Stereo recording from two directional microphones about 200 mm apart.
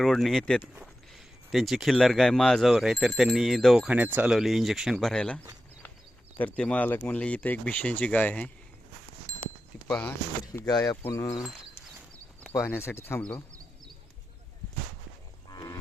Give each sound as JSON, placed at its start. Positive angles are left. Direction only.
{"t": 0.0, "sound": "speech", "side_deg": 0}
{"t": 6.4, "sound": "speech", "side_deg": 5}
{"t": 10.4, "sound": "speech", "side_deg": 20}
{"t": 12.5, "sound": "speech", "side_deg": 10}
{"t": 15.4, "sound": "livestock", "side_deg": 20}